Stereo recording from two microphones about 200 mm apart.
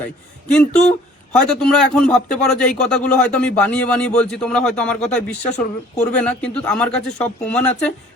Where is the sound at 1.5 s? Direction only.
5° left (ahead or behind).